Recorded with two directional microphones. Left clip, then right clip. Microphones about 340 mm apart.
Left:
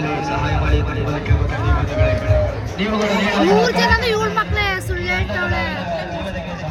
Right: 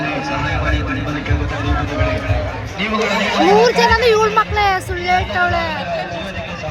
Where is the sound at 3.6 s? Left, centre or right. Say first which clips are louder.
Right 4 dB; centre.